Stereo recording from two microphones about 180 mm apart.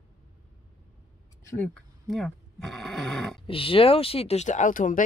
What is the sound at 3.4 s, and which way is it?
Speech, 30° left (ahead or behind).